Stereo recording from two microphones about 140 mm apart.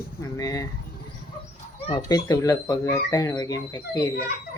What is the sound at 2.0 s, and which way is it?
Speech, 25° left (ahead or behind).